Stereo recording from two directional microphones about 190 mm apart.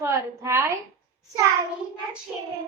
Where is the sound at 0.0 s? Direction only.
15° right (ahead or behind).